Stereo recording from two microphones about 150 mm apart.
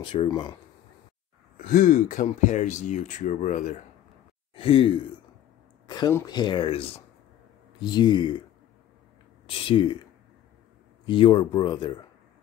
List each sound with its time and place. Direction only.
0.0 s speech: 40° left (ahead or behind)
1.6 s speech: 65° left (ahead or behind)
4.6 s speech: 40° left (ahead or behind)
5.9 s speech: 30° left (ahead or behind)
7.8 s speech: 30° left (ahead or behind)
9.5 s speech: 35° left (ahead or behind)
11.1 s speech: 35° left (ahead or behind)